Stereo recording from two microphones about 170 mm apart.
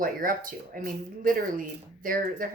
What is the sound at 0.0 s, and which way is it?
Speech, 55° right (ahead or behind).